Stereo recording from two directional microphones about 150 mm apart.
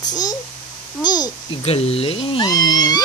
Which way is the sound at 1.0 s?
25° left (ahead or behind).